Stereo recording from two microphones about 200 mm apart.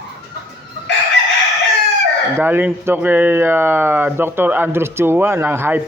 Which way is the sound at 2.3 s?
10° right (ahead or behind).